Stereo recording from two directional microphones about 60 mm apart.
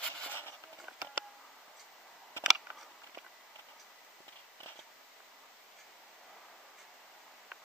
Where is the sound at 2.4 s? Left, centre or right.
Centre.